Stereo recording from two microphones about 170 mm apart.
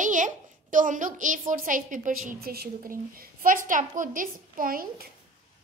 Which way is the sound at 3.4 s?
55° right (ahead or behind).